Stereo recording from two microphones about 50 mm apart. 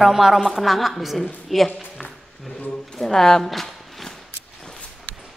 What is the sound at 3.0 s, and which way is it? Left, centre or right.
Speech, centre.